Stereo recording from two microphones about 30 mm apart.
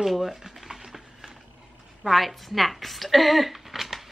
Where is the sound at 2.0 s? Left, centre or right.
Centre.